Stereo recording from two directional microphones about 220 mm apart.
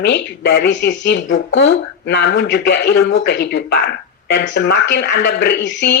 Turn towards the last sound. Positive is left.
turn(degrees=55)  # may be behind; listen again after turning